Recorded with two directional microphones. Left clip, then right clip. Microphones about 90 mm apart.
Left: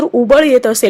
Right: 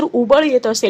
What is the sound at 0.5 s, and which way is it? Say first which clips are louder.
Speech: left 5 dB; 50° left (ahead or behind).